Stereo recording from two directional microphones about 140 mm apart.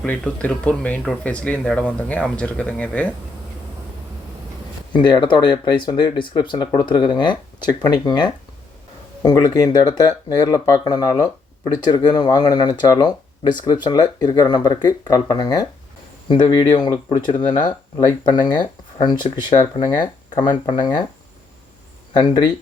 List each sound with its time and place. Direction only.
0.0 s speech: 10° left (ahead or behind)
4.9 s speech: 35° left (ahead or behind)